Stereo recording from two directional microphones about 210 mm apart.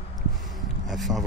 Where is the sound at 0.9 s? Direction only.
Centre (ahead or behind).